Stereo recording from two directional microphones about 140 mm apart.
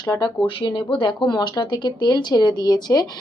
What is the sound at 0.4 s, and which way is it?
Speech, 35° left (ahead or behind).